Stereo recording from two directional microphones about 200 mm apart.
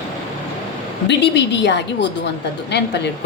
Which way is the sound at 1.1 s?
60° left (ahead or behind).